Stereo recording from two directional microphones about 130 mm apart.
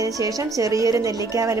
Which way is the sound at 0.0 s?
25° right (ahead or behind).